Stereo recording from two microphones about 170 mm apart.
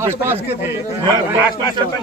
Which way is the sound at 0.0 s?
15° right (ahead or behind).